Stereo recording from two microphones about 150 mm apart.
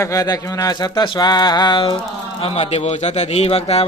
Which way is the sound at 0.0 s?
25° left (ahead or behind).